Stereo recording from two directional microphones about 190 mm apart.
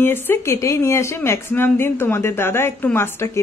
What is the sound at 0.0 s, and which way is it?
A woman's voice, 10° left (ahead or behind).